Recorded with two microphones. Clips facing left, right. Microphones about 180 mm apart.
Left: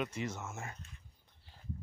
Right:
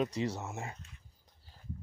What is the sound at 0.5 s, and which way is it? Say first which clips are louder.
Speech: right 4 dB; 20° right (ahead or behind).